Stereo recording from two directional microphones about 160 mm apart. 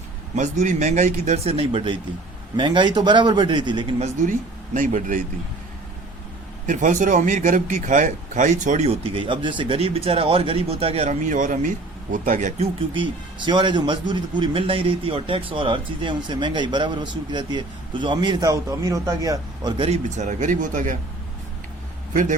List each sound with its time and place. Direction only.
0.3 s speech: 50° right (ahead or behind); by 4.1 s 30° right (ahead or behind)
4.3 s speech: 55° right (ahead or behind)
6.7 s speech: 55° right (ahead or behind)
12.9 s speech: 30° right (ahead or behind)
19.9 s speech: 50° right (ahead or behind)
22.1 s a man's voice: 50° right (ahead or behind)